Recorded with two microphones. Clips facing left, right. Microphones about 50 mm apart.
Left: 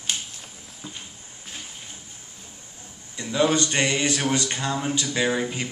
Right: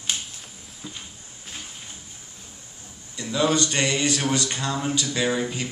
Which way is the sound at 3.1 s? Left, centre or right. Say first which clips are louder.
Left 1 dB; left.